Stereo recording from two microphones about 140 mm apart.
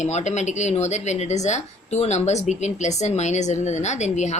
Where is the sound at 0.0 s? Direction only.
55° left (ahead or behind).